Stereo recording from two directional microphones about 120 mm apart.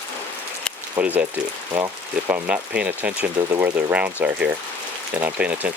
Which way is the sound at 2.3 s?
10° right (ahead or behind).